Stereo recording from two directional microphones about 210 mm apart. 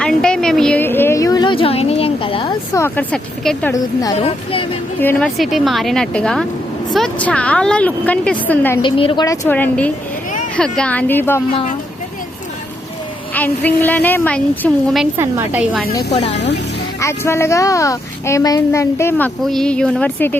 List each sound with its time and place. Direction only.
0.0 s a sound: 5° left (ahead or behind); by 2.5 s 25° left (ahead or behind)
2.7 s speech: 10° left (ahead or behind)
4.2 s speech: 25° left (ahead or behind)
4.9 s a woman's voice: 5° left (ahead or behind)
8.8 s speech: 25° left (ahead or behind)
13.3 s speech: 10° left (ahead or behind)
15.2 s a woman's voice: 10° right (ahead or behind)
16.1 s speech: 35° left (ahead or behind)
17.0 s speech: 15° left (ahead or behind)